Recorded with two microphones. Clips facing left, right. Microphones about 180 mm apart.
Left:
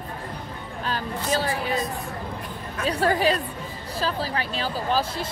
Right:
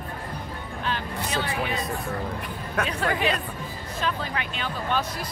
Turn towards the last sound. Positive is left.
turn(degrees=35)  # may be behind; listen again after turning